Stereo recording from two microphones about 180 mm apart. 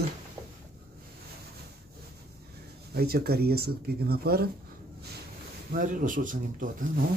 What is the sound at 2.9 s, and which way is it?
Speech, 60° right (ahead or behind).